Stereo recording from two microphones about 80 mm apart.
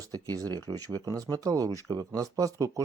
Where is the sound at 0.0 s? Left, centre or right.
Right.